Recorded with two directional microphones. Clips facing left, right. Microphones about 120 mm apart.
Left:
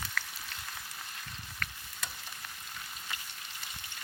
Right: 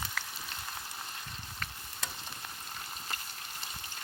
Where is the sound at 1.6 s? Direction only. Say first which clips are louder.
Even; 25° right (ahead or behind).